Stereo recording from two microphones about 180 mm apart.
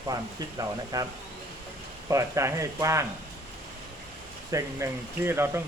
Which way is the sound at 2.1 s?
15° right (ahead or behind).